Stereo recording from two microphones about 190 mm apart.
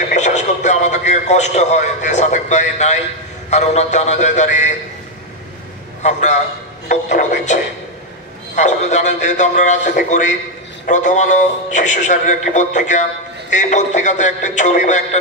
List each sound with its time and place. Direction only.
0.1 s a sound: 40° left (ahead or behind)
3.4 s speech: 35° left (ahead or behind)
6.0 s speech: 40° left (ahead or behind)